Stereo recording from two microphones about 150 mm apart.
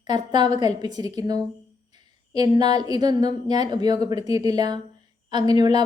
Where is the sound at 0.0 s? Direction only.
30° right (ahead or behind).